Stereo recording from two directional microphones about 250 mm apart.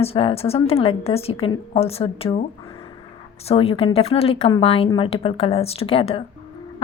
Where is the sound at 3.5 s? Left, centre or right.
Left.